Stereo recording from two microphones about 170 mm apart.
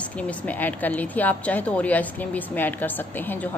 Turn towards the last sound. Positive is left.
turn(degrees=10)  # may be behind; listen again after turning